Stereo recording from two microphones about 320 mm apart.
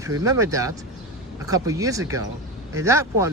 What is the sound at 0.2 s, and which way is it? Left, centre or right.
Speech, centre.